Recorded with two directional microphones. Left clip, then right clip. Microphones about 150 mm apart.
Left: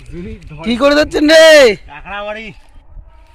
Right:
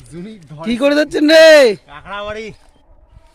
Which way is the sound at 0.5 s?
15° right (ahead or behind).